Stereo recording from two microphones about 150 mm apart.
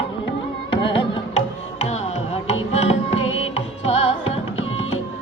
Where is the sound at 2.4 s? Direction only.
45° left (ahead or behind).